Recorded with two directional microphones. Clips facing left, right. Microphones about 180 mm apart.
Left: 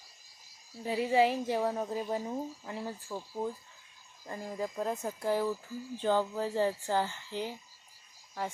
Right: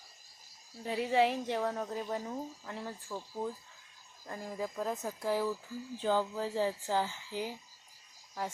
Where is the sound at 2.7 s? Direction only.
5° left (ahead or behind).